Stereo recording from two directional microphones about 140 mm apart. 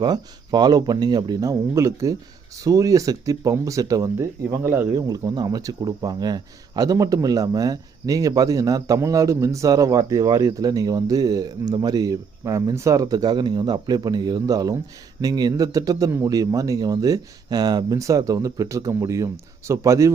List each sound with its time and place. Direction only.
0.0 s speech: 30° right (ahead or behind)